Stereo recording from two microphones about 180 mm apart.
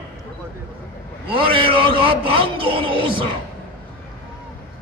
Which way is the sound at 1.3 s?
30° right (ahead or behind).